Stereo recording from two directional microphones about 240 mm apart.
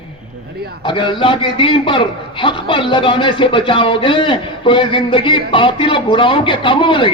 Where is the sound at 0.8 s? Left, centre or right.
Centre.